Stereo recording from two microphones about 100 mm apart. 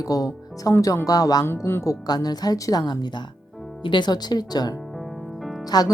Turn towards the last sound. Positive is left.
turn(degrees=40)  # may be behind; listen again after turning